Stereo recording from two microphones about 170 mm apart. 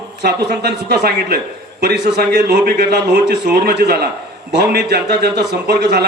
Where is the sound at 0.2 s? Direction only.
75° right (ahead or behind).